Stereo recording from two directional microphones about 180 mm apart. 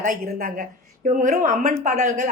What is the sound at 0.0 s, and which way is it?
A woman's voice, 50° right (ahead or behind).